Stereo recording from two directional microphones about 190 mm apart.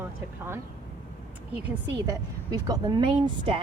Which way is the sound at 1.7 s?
20° right (ahead or behind).